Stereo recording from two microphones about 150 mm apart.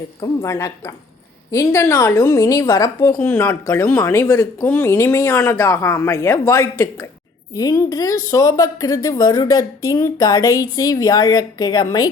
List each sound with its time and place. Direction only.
0.2 s a woman's voice: 20° left (ahead or behind)